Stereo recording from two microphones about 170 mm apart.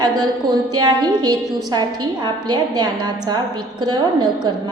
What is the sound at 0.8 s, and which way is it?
A woman's voice, 25° right (ahead or behind).